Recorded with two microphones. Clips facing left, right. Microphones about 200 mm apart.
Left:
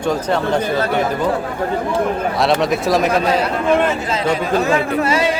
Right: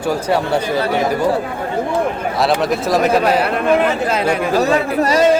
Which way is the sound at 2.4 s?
Centre (ahead or behind).